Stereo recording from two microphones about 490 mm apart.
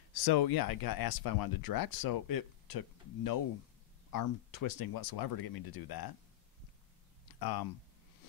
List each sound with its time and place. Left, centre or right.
0.1 s speech: left
7.3 s speech: left